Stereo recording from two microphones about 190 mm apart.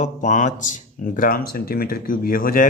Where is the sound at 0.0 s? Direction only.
40° left (ahead or behind).